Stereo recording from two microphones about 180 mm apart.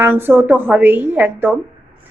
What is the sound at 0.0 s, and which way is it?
A woman's voice, 10° right (ahead or behind).